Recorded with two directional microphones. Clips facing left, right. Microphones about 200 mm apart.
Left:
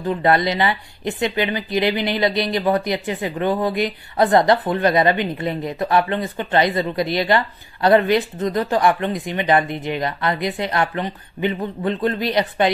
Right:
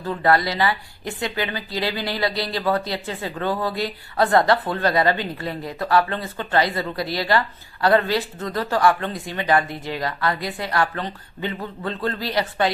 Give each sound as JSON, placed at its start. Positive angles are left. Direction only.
{"t": 0.0, "sound": "speech", "side_deg": 20}